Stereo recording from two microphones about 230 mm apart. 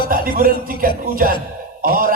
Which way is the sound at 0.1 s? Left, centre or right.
Right.